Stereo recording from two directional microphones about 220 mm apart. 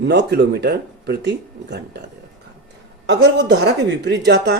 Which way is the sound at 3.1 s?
50° right (ahead or behind).